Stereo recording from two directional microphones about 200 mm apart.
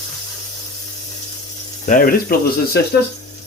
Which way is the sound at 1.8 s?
45° left (ahead or behind).